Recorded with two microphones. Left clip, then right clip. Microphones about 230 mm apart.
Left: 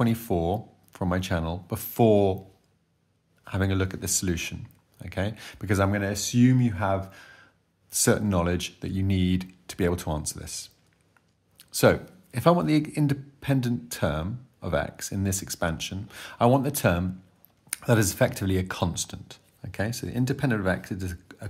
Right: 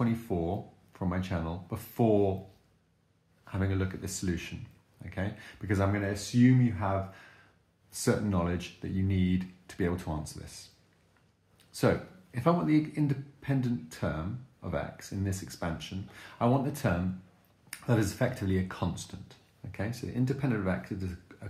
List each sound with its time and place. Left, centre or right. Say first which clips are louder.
0.0 s speech: left 6 dB; left
3.4 s speech: left 6 dB; left